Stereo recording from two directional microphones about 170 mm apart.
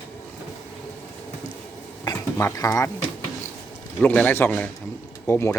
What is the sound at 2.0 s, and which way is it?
Speech, 20° left (ahead or behind).